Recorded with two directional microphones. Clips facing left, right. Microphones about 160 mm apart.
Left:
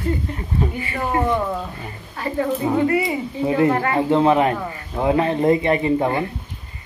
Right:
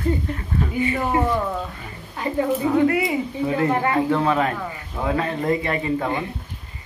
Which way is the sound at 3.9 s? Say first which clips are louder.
Left 4 dB; 20° left (ahead or behind).